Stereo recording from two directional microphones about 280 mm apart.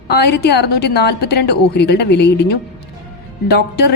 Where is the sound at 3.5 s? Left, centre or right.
Left.